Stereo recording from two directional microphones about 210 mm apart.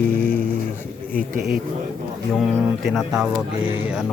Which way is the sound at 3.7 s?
10° right (ahead or behind).